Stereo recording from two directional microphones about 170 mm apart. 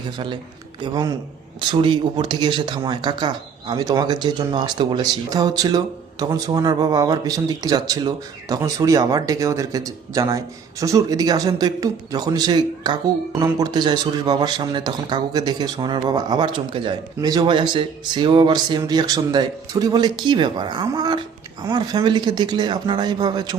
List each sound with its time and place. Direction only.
1.7 s speech: 30° right (ahead or behind)